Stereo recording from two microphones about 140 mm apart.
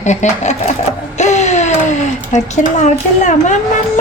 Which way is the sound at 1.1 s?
55° left (ahead or behind).